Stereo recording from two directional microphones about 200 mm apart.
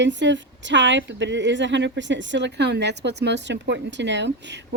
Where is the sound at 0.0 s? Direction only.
65° right (ahead or behind).